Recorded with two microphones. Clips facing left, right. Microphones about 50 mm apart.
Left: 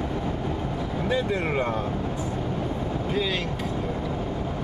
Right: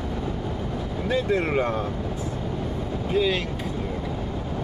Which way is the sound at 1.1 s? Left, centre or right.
Centre.